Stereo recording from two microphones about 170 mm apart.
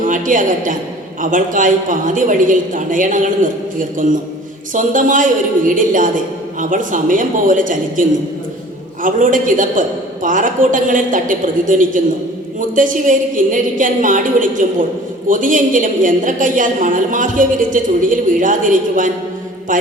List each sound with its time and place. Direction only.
0.0 s a woman's voice: 50° right (ahead or behind)